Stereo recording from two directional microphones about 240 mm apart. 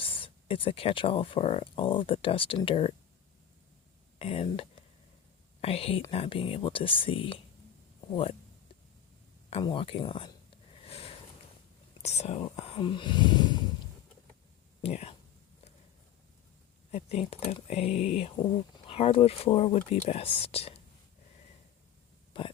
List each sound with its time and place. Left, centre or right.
0.0 s speech: left
4.2 s speech: left
9.5 s a sound: left
12.0 s speech: left
14.8 s speech: left
16.9 s speech: left
22.3 s throat clearing: left